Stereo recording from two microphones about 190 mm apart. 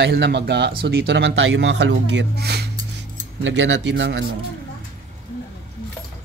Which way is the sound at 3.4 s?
75° right (ahead or behind).